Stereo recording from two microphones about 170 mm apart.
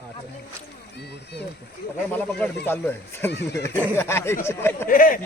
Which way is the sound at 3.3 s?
85° left.